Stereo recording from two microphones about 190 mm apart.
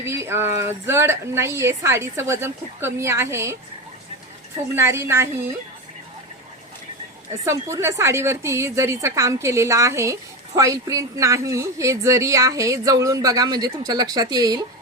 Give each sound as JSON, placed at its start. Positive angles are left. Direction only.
{"t": 0.0, "sound": "a woman's voice", "side_deg": -15}
{"t": 4.7, "sound": "a woman's voice", "side_deg": -15}
{"t": 7.4, "sound": "a woman's voice", "side_deg": -15}